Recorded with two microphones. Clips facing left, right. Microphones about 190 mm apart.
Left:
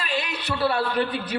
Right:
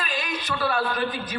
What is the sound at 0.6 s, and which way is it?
Speech, 30° left (ahead or behind).